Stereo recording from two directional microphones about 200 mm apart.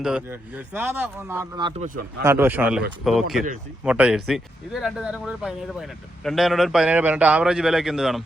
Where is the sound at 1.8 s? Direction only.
45° right (ahead or behind).